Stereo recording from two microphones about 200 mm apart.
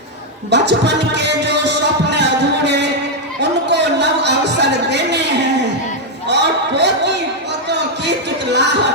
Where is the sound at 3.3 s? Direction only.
60° right (ahead or behind).